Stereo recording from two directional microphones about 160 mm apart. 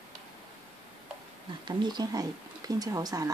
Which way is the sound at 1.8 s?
25° right (ahead or behind).